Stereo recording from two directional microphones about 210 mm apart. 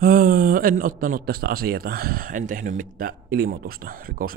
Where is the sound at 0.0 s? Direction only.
40° right (ahead or behind).